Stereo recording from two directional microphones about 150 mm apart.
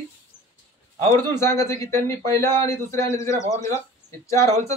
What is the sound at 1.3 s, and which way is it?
Speech, 20° left (ahead or behind).